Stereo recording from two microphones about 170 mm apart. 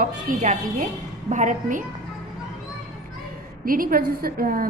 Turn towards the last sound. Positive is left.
turn(degrees=-60)  # may be behind; listen again after turning